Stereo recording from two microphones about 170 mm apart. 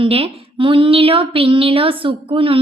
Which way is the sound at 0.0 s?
30° right (ahead or behind).